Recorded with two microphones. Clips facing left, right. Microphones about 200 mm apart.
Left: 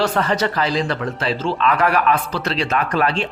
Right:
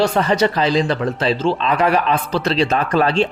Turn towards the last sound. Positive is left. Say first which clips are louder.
# right 3 dB
turn(degrees=-30)  # may be behind; listen again after turning